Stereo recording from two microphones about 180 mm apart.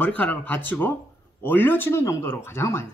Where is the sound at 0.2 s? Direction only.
10° left (ahead or behind).